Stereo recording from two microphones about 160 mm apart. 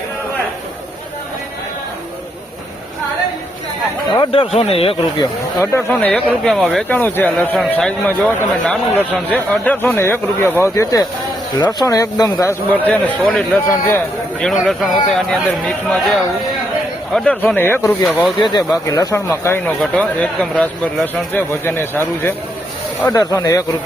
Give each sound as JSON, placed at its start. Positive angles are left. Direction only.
{"t": 4.2, "sound": "speech", "side_deg": 35}
{"t": 5.5, "sound": "speech", "side_deg": 10}
{"t": 12.9, "sound": "speech", "side_deg": 10}
{"t": 14.4, "sound": "speech", "side_deg": 0}